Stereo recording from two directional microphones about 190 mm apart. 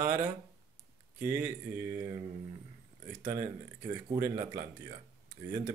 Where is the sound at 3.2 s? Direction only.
15° right (ahead or behind).